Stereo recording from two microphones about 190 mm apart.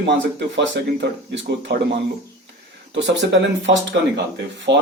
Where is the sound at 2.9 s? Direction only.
70° right (ahead or behind).